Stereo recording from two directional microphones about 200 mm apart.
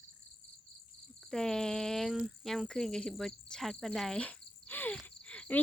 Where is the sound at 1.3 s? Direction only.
5° left (ahead or behind).